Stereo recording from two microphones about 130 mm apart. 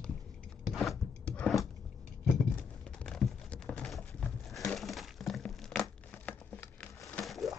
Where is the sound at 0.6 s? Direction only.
Centre (ahead or behind).